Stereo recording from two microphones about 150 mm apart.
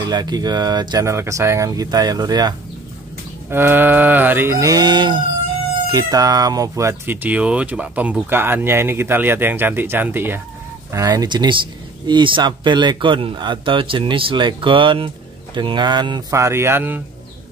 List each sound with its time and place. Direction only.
0.0 s speech: 25° right (ahead or behind)
3.4 s speech: 15° right (ahead or behind)